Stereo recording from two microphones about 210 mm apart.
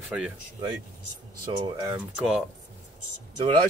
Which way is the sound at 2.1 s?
5° right (ahead or behind).